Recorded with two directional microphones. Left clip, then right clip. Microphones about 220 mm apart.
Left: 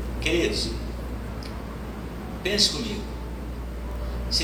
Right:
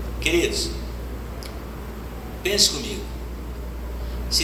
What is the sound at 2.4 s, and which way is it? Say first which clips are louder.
Speech: right 3 dB; 20° right (ahead or behind).